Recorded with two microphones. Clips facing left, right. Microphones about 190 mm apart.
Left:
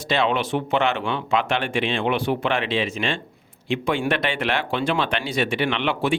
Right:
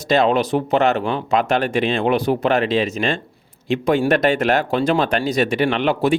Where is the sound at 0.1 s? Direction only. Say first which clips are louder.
Right 6 dB; 40° right (ahead or behind).